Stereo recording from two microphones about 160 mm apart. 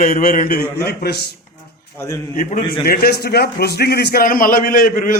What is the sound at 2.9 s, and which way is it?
A man's voice, 75° left (ahead or behind).